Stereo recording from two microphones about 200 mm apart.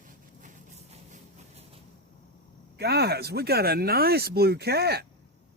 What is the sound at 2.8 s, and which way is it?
Speech, 55° right (ahead or behind).